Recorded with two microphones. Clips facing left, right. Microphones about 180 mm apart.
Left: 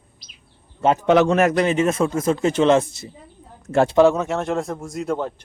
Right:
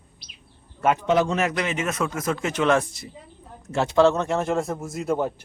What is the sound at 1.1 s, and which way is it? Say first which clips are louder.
A man's voice: left 9 dB; 65° left (ahead or behind).